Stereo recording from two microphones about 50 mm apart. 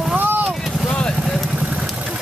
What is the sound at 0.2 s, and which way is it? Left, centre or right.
Boat, right.